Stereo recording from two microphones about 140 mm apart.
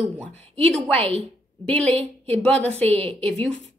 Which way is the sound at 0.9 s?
45° right (ahead or behind).